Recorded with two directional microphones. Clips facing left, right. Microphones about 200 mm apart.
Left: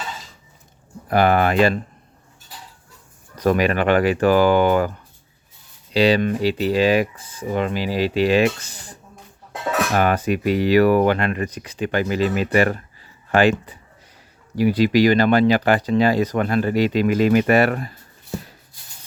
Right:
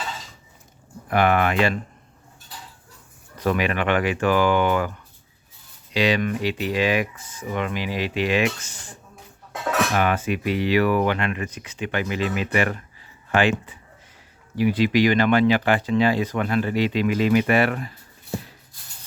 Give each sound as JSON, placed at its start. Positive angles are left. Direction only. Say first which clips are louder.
{"t": 1.0, "sound": "speech", "louder": "left 3 dB", "side_deg": 35}
{"t": 3.3, "sound": "speech", "louder": "left 5 dB", "side_deg": 40}
{"t": 5.9, "sound": "speech", "louder": "left 5 dB", "side_deg": 35}
{"t": 8.7, "sound": "music", "louder": "left 2 dB", "side_deg": 35}
{"t": 9.9, "sound": "speech", "louder": "left 3 dB", "side_deg": 40}